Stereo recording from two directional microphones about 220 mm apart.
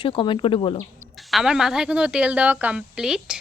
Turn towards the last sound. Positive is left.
turn(degrees=-5)  # may be behind; listen again after turning